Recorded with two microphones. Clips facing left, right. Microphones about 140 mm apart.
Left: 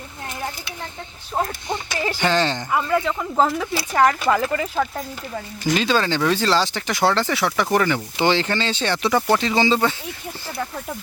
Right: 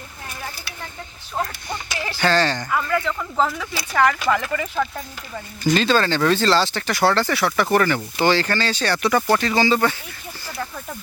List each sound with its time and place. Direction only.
2.1 s speech: 20° left (ahead or behind)
3.3 s speech: 30° left (ahead or behind)
5.7 s speech: 15° left (ahead or behind)